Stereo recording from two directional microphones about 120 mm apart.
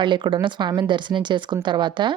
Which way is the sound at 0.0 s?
45° right (ahead or behind).